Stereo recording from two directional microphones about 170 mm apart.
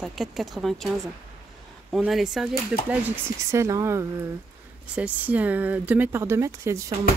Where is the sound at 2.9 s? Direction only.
15° right (ahead or behind).